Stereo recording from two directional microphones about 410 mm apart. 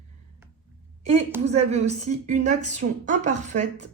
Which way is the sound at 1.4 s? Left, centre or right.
Centre.